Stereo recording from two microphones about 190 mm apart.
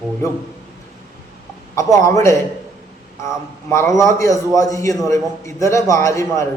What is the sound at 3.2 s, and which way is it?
A man's voice, 15° left (ahead or behind).